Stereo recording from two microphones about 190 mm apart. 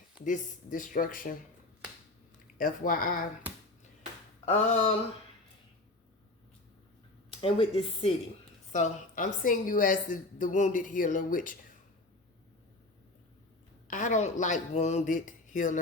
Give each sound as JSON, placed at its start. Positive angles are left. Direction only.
{"t": 0.3, "sound": "a woman's voice", "side_deg": 45}
{"t": 2.6, "sound": "a woman's voice", "side_deg": 45}
{"t": 4.4, "sound": "speech", "side_deg": 35}
{"t": 7.3, "sound": "speech", "side_deg": 30}
{"t": 8.7, "sound": "a woman's voice", "side_deg": 40}
{"t": 13.8, "sound": "speech", "side_deg": 40}